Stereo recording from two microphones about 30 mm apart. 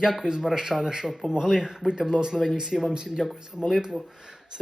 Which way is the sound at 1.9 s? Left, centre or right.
Right.